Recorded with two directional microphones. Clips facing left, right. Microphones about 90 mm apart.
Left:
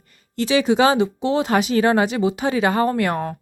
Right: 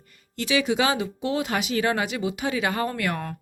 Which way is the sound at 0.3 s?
35° left (ahead or behind).